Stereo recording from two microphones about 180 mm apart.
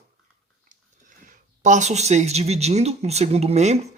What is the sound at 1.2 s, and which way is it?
Speech, 45° right (ahead or behind).